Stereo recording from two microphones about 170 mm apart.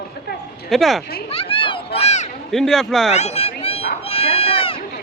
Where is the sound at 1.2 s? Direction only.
30° left (ahead or behind).